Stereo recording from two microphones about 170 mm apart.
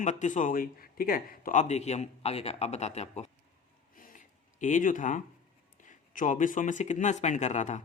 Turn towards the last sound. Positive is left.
turn(degrees=40)  # may be behind; listen again after turning